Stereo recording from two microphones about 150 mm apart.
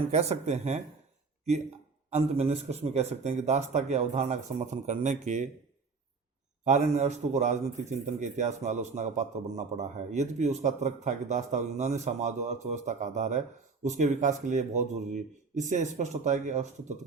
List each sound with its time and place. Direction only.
0.1 s speech: 45° right (ahead or behind)
2.0 s speech: 45° right (ahead or behind)
6.7 s speech: 50° right (ahead or behind)